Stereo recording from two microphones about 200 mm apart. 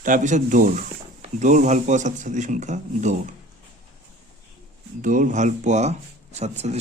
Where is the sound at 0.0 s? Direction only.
40° right (ahead or behind).